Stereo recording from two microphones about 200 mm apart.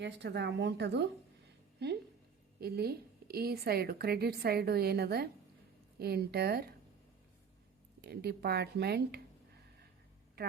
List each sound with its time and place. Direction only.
0.0 s speech: 60° right (ahead or behind)
2.6 s a woman's voice: 50° right (ahead or behind)
8.0 s a woman's voice: 55° right (ahead or behind)